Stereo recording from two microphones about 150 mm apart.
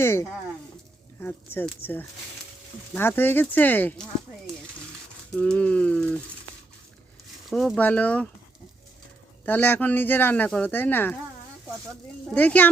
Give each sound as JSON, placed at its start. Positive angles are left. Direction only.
{"t": 0.0, "sound": "speech", "side_deg": 15}
{"t": 5.3, "sound": "speech", "side_deg": 5}
{"t": 7.5, "sound": "speech", "side_deg": 5}
{"t": 9.5, "sound": "speech", "side_deg": 10}
{"t": 12.3, "sound": "speech", "side_deg": 10}